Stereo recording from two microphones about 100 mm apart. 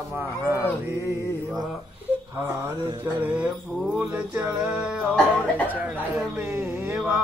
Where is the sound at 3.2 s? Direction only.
15° right (ahead or behind).